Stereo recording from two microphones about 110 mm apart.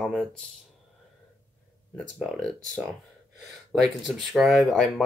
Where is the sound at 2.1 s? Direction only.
5° left (ahead or behind).